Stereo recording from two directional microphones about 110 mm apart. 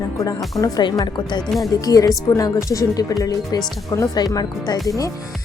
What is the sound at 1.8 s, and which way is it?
A woman's voice, 30° left (ahead or behind).